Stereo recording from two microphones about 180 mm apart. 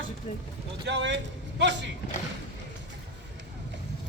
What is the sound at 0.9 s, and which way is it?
Speech, 80° right.